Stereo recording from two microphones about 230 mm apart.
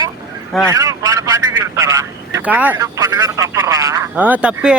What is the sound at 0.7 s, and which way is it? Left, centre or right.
A man's voice, centre.